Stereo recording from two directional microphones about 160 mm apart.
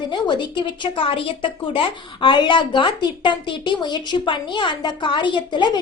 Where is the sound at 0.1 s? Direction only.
30° left (ahead or behind).